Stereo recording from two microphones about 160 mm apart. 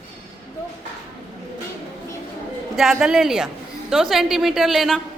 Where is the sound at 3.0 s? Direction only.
5° right (ahead or behind).